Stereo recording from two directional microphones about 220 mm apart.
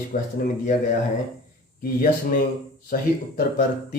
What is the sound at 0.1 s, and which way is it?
Speech, 40° left (ahead or behind).